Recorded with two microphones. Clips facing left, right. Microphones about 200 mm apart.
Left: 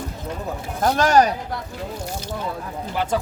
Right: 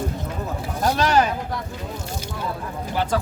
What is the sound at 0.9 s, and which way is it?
Speech, 45° left (ahead or behind).